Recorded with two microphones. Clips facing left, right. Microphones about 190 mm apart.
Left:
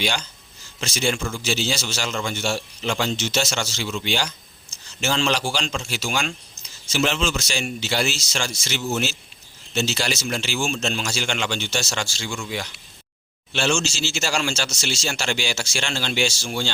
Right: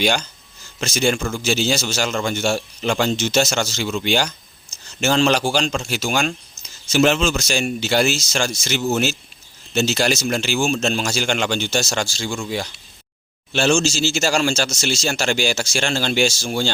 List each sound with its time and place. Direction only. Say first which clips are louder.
0.0 s a man's voice: right 6 dB; 45° right (ahead or behind)